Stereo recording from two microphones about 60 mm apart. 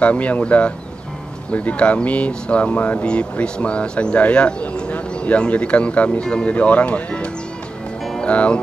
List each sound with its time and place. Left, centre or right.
0.0 s speech: left